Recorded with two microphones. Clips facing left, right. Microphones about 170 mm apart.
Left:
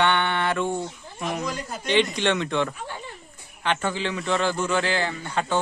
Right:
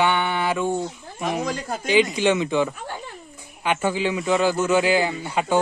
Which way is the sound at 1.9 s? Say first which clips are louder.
Right 3 dB; 5° right (ahead or behind).